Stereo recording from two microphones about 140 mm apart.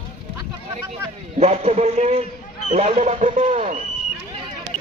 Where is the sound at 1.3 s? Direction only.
50° right (ahead or behind).